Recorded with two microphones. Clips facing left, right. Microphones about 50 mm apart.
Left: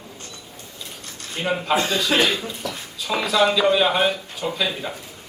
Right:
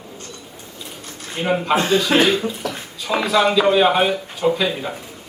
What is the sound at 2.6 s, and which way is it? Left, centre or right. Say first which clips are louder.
Speech: right 4 dB; right.